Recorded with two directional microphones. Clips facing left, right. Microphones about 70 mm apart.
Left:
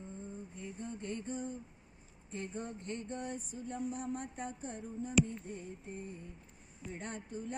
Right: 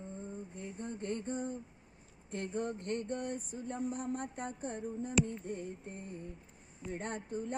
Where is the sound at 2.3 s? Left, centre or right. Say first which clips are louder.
Right 5 dB; right.